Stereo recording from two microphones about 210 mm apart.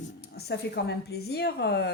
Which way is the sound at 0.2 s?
50° left (ahead or behind).